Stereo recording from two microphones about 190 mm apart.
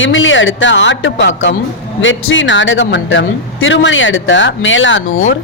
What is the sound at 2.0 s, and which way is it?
Speech, 90° left.